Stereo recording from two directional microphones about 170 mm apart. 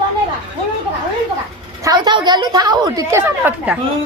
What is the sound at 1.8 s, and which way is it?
A woman's voice, 25° right (ahead or behind).